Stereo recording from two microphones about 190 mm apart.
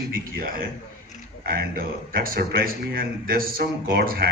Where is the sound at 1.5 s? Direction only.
50° right (ahead or behind).